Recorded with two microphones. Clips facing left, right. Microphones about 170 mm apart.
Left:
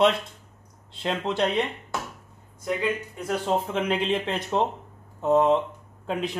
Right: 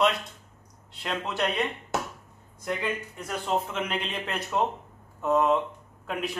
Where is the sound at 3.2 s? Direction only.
35° left (ahead or behind).